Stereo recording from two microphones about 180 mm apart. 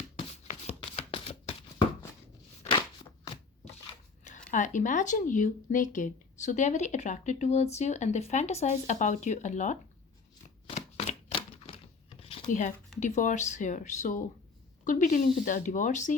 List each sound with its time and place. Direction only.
0.7 s shuffling cards: 35° left (ahead or behind)
4.5 s speech: 45° left (ahead or behind)
10.7 s a sound: 35° left (ahead or behind)
12.5 s speech: 45° left (ahead or behind)